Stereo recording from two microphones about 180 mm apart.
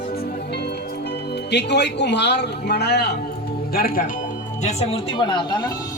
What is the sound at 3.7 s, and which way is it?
Speech, 55° left (ahead or behind).